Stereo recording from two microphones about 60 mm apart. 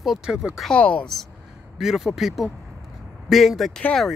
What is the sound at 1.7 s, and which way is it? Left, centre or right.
Speech, centre.